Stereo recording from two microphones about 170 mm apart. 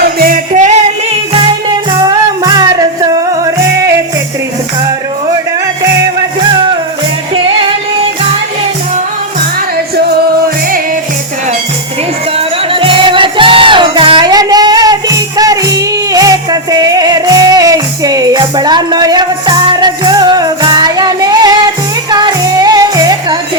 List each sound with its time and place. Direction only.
0.2 s music: 55° right (ahead or behind)
1.3 s music: 30° right (ahead or behind)
12.4 s music: 30° right (ahead or behind)